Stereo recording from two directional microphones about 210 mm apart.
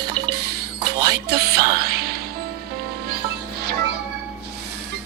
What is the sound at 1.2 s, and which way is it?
Music, 50° right (ahead or behind).